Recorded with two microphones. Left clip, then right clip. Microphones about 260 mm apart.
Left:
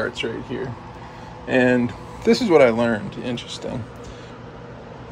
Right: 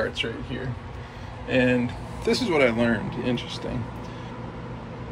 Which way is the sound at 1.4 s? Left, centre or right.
Left.